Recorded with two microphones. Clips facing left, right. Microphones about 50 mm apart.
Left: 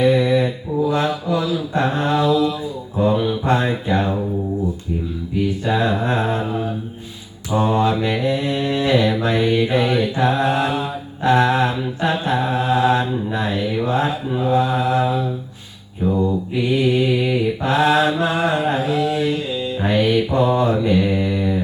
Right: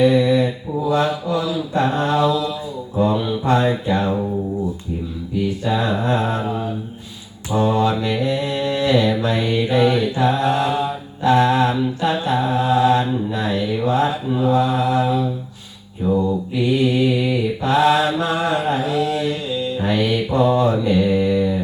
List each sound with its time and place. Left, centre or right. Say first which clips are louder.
0.0 s mantra: right 1 dB; left
5.6 s mantra: left 1 dB; left
7.5 s mantra: even; left
11.2 s mantra: right 1 dB; left